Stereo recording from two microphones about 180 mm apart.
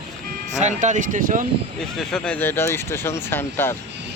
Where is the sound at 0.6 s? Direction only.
40° right (ahead or behind).